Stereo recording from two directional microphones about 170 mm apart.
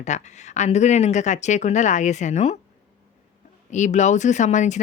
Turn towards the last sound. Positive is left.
turn(degrees=45)  # may be behind; listen again after turning